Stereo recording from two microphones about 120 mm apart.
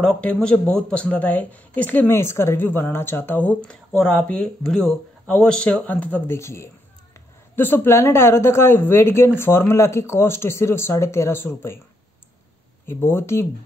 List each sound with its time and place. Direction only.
0.0 s speech: 10° left (ahead or behind)
12.8 s speech: 20° left (ahead or behind)